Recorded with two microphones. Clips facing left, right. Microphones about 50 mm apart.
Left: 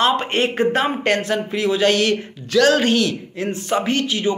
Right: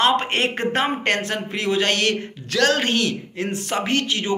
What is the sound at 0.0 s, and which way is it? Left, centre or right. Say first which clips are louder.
Speech: left 1 dB; right.